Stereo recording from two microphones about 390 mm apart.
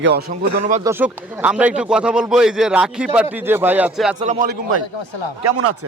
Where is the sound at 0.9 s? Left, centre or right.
Centre.